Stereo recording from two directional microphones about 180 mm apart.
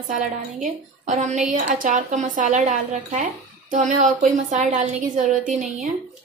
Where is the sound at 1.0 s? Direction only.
40° right (ahead or behind).